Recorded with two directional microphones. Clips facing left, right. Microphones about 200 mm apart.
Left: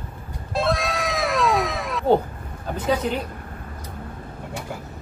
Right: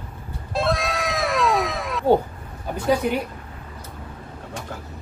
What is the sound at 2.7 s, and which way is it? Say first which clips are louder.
Speech: right 2 dB; 10° right (ahead or behind).